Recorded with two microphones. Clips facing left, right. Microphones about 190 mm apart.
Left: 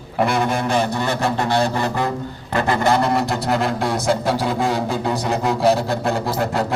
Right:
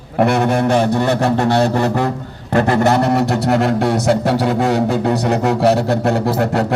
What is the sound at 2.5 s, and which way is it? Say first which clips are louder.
Speech: right 4 dB; 65° right (ahead or behind).